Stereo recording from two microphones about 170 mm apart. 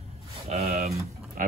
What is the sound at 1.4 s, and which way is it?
Speech, 55° right (ahead or behind).